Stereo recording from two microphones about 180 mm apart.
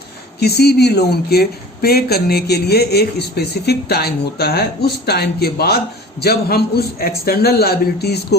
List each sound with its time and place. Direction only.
0.3 s a woman's voice: 65° left (ahead or behind)